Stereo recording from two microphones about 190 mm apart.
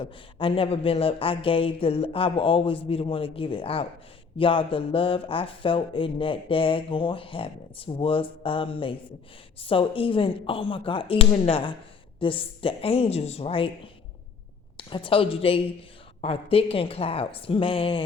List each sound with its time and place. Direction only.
0.0 s speech: 30° left (ahead or behind)